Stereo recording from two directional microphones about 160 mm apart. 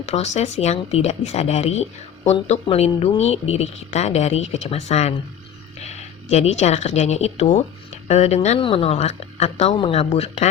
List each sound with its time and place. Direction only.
0.0 s speech: 45° left (ahead or behind)